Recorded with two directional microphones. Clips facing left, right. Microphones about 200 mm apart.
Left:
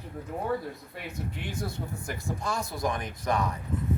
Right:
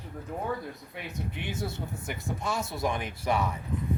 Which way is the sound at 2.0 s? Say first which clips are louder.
Even; 5° right (ahead or behind).